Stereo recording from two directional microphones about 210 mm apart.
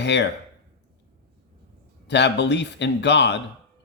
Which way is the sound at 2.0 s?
55° left (ahead or behind).